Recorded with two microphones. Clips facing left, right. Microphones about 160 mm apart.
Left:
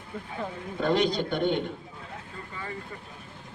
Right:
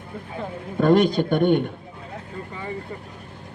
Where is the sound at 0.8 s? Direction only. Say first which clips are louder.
Right 8 dB; 50° right (ahead or behind).